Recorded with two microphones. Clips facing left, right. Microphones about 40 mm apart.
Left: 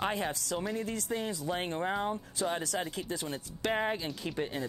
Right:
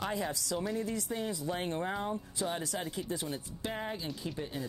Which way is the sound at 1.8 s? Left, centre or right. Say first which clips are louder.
Left 3 dB; left.